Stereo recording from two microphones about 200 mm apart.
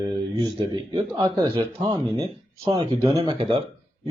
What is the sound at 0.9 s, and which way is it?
Speech, 25° right (ahead or behind).